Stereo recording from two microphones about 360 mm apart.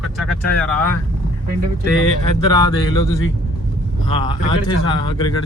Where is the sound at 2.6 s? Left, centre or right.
Centre.